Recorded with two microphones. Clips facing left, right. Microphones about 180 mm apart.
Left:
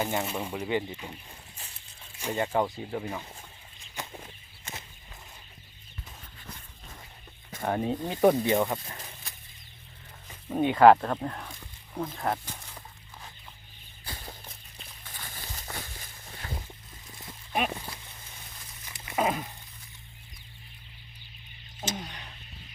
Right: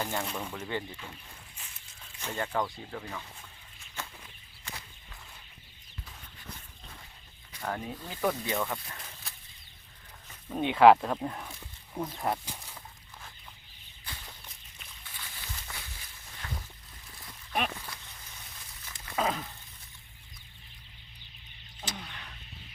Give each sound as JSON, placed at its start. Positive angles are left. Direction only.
{"t": 0.0, "sound": "speech", "side_deg": 20}
{"t": 2.1, "sound": "speech", "side_deg": 15}
{"t": 4.0, "sound": "a sound", "side_deg": 15}
{"t": 7.6, "sound": "speech", "side_deg": 30}
{"t": 8.2, "sound": "speech", "side_deg": 35}
{"t": 10.6, "sound": "speech", "side_deg": 0}
{"t": 14.0, "sound": "walk", "side_deg": 40}
{"t": 15.0, "sound": "a sound", "side_deg": 45}
{"t": 16.4, "sound": "boat", "side_deg": 30}
{"t": 17.7, "sound": "a sound", "side_deg": 30}
{"t": 18.9, "sound": "dog", "side_deg": 15}
{"t": 21.8, "sound": "a sound", "side_deg": 20}